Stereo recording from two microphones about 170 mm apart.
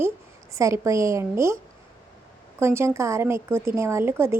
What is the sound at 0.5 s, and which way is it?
A woman's voice, 20° right (ahead or behind).